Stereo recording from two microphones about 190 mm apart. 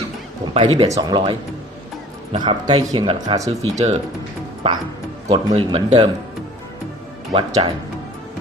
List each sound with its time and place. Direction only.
0.5 s speech: 25° right (ahead or behind)
3.4 s speech: 35° right (ahead or behind)
5.3 s speech: 30° right (ahead or behind)
7.3 s speech: 30° right (ahead or behind)